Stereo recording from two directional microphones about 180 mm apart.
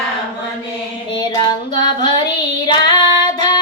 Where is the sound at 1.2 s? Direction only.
25° left (ahead or behind).